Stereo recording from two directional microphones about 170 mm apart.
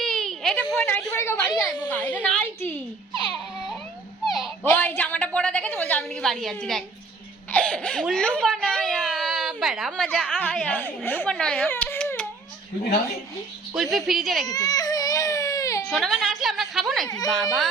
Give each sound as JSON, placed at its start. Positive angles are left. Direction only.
{"t": 0.0, "sound": "baby cry", "side_deg": 0}
{"t": 0.8, "sound": "a woman's voice", "side_deg": 10}
{"t": 3.1, "sound": "baby cry", "side_deg": -30}
{"t": 4.4, "sound": "a woman's voice", "side_deg": 5}
{"t": 13.7, "sound": "a woman's voice", "side_deg": 0}
{"t": 14.4, "sound": "baby cry", "side_deg": 20}
{"t": 15.9, "sound": "a woman's voice", "side_deg": 0}